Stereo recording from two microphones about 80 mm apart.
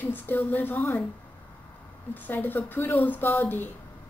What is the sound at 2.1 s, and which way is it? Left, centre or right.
A woman's voice, left.